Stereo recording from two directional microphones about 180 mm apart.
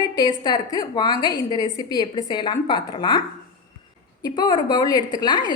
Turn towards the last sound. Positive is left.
turn(degrees=25)  # may be behind; listen again after turning